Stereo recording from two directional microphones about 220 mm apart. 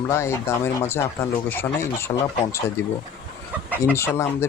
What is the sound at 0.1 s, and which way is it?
Speech, 10° left (ahead or behind).